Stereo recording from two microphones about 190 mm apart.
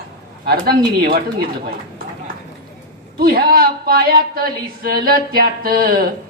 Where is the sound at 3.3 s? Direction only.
50° right (ahead or behind).